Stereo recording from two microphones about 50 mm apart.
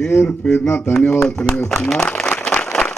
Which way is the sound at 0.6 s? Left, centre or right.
Left.